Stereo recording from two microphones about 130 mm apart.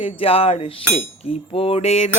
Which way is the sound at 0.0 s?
45° left (ahead or behind).